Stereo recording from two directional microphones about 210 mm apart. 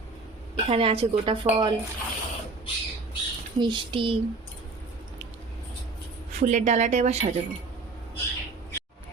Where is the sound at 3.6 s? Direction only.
20° right (ahead or behind).